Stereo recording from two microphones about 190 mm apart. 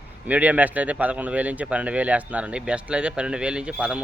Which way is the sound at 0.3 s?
10° right (ahead or behind).